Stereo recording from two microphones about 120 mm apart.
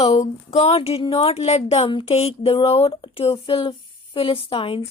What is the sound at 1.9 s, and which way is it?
Speech, 40° left (ahead or behind).